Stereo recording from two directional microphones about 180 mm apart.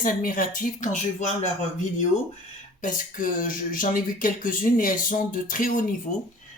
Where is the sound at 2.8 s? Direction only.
50° left (ahead or behind).